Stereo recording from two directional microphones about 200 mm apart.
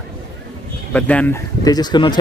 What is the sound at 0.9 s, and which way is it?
Speech, 5° left (ahead or behind).